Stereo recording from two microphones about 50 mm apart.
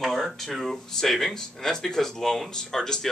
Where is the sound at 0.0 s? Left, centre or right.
Centre.